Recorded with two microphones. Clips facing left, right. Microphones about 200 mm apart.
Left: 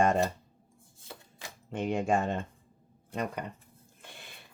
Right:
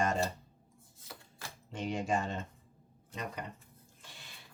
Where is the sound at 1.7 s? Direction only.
55° left (ahead or behind).